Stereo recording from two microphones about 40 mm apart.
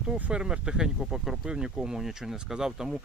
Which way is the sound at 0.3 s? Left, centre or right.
Right.